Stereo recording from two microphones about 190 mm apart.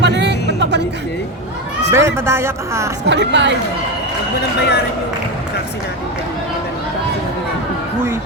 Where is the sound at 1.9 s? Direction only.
15° right (ahead or behind).